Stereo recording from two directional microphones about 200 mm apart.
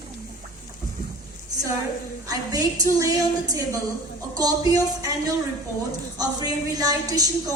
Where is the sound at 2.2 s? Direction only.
20° right (ahead or behind).